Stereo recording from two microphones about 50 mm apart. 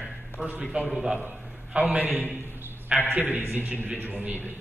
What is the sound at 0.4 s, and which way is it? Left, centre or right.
Speech, right.